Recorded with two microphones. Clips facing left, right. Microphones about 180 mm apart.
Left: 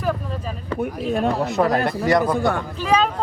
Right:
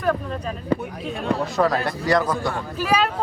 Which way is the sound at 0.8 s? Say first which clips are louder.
Left 8 dB; 55° left (ahead or behind).